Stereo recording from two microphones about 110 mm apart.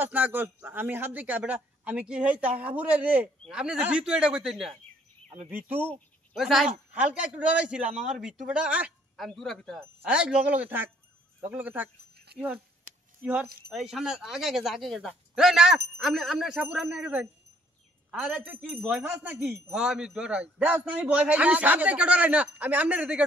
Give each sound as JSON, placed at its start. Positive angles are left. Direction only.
{"t": 0.0, "sound": "a man's voice", "side_deg": -15}
{"t": 5.5, "sound": "a man's voice", "side_deg": -20}
{"t": 6.3, "sound": "a man's voice", "side_deg": -5}
{"t": 9.1, "sound": "speech", "side_deg": 0}
{"t": 10.0, "sound": "a man's voice", "side_deg": -10}
{"t": 13.2, "sound": "a man's voice", "side_deg": -10}